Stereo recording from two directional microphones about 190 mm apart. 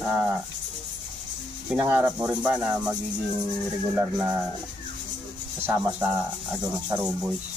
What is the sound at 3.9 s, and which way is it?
Speech, 5° right (ahead or behind).